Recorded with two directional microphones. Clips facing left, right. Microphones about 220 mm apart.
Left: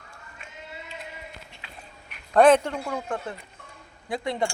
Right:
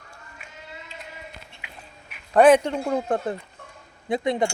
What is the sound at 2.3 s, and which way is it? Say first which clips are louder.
Speech: right 2 dB; 10° right (ahead or behind).